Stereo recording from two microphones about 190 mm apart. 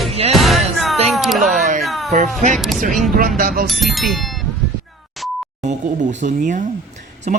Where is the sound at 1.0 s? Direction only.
Centre (ahead or behind).